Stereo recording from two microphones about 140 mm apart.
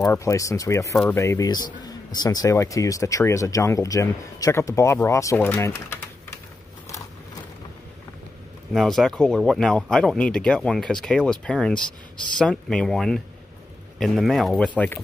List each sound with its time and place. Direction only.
0.1 s speech: 20° left (ahead or behind)
8.7 s speech: centre (ahead or behind)